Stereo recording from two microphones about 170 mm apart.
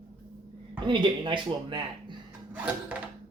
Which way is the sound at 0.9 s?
25° right (ahead or behind).